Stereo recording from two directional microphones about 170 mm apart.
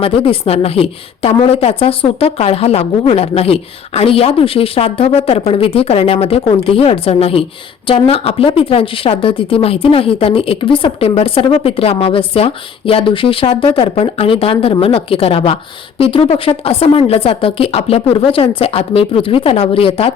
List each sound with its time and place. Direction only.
0.0 s a woman's voice: 35° left (ahead or behind)